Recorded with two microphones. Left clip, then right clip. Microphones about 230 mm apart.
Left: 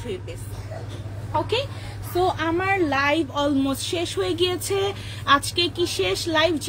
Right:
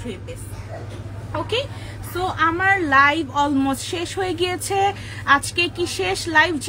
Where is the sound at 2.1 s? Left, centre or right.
Centre.